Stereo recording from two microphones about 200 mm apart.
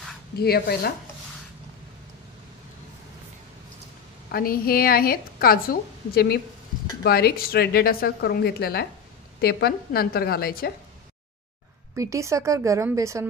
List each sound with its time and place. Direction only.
0.4 s a woman's voice: 50° left (ahead or behind)
4.3 s a woman's voice: 45° left (ahead or behind)
11.9 s a woman's voice: 15° right (ahead or behind)